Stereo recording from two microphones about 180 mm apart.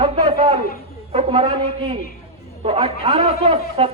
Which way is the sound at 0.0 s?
20° right (ahead or behind).